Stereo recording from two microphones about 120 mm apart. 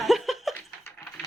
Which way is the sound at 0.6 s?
15° left (ahead or behind).